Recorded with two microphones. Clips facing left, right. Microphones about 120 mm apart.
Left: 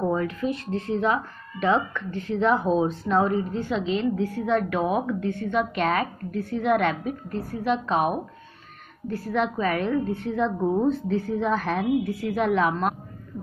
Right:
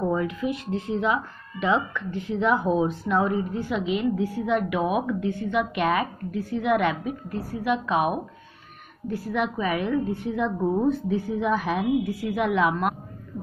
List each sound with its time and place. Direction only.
0.2 s a woman's voice: 15° right (ahead or behind)
2.6 s speech: 25° left (ahead or behind)
3.3 s a woman's voice: 5° right (ahead or behind)